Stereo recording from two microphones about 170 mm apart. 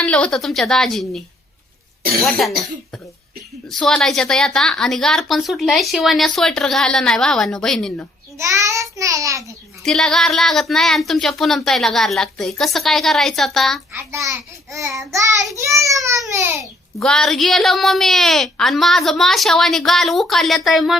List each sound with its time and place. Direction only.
0.0 s speech: 5° left (ahead or behind)
3.7 s speech: 5° left (ahead or behind)
8.4 s a child's voice: 20° right (ahead or behind)
9.8 s speech: 5° left (ahead or behind)
13.9 s a child's voice: 15° right (ahead or behind)
17.0 s speech: 5° left (ahead or behind)